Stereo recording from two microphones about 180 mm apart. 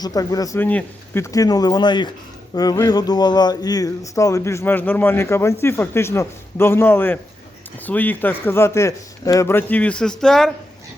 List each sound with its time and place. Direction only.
0.0 s speech: 20° left (ahead or behind); by 10.5 s centre (ahead or behind)